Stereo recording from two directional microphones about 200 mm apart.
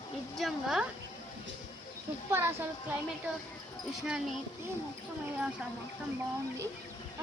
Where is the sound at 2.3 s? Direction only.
10° right (ahead or behind).